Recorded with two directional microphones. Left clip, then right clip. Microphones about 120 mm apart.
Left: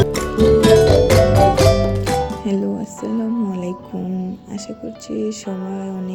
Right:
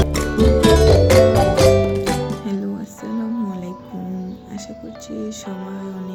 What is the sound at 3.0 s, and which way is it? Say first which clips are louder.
Music: left 3 dB; 25° left (ahead or behind).